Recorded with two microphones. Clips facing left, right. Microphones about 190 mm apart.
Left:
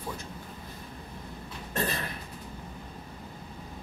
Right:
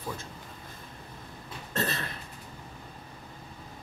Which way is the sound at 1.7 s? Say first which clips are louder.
Even; 10° left (ahead or behind).